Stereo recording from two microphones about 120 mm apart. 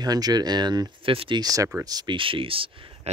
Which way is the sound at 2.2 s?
50° right (ahead or behind).